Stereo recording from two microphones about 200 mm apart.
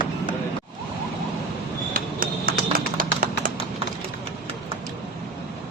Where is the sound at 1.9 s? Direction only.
45° right (ahead or behind).